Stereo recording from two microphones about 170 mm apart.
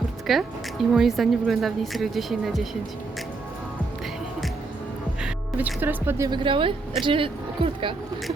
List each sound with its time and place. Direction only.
0.3 s speech: centre (ahead or behind)
5.2 s speech: 10° right (ahead or behind); by 7.9 s 30° right (ahead or behind)